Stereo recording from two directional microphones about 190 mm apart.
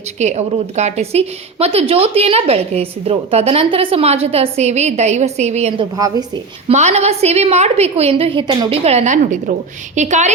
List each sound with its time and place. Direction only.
0.2 s a woman's voice: 35° right (ahead or behind)
6.0 s a woman's voice: 20° right (ahead or behind)
6.7 s a woman's voice: 35° right (ahead or behind)